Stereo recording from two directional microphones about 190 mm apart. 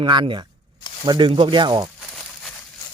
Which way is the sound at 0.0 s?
25° right (ahead or behind).